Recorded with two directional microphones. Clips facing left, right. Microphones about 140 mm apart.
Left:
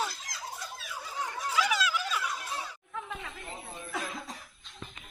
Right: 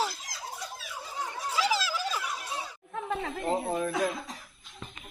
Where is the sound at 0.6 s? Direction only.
Centre (ahead or behind).